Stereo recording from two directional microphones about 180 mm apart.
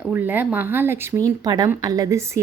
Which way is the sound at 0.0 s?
10° right (ahead or behind).